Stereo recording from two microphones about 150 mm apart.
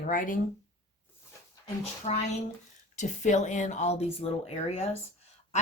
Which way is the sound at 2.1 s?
45° left (ahead or behind).